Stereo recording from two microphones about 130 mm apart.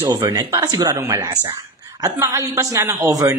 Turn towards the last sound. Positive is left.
turn(degrees=-25)  # may be behind; listen again after turning